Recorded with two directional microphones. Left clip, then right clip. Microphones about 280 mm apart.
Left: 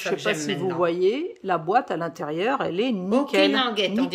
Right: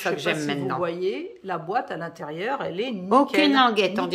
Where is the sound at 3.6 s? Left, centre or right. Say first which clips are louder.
Right 4 dB; centre.